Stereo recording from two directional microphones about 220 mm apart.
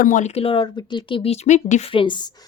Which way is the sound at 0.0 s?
35° left (ahead or behind).